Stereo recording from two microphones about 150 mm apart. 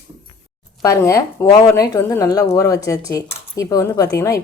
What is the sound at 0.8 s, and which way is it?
A woman's voice, 20° left (ahead or behind).